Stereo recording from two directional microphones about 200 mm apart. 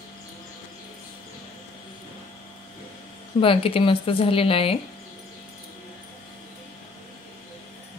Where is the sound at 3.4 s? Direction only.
25° left (ahead or behind).